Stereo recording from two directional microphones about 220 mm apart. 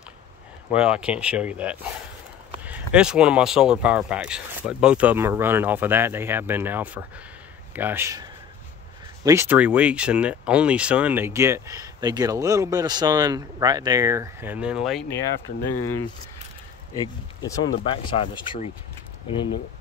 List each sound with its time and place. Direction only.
0.7 s speech: 5° right (ahead or behind)
15.7 s speech: 90° left
16.9 s speech: 15° left (ahead or behind)